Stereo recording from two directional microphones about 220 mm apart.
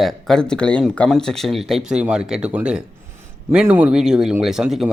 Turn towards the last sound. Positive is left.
turn(degrees=0)  # may be behind; listen again after turning